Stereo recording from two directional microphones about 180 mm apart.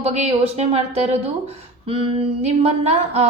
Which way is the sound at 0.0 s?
35° right (ahead or behind).